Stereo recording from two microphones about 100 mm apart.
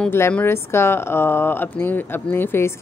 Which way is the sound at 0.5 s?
25° left (ahead or behind).